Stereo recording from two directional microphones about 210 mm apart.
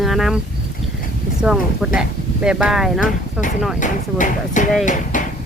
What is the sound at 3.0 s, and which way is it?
Speech, 40° left (ahead or behind).